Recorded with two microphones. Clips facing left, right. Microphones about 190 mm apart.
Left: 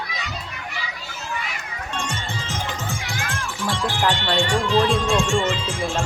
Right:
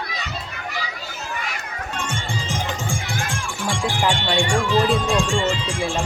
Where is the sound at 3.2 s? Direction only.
15° right (ahead or behind).